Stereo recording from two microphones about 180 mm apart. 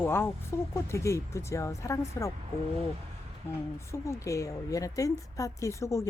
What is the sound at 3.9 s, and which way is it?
Speech, 15° left (ahead or behind).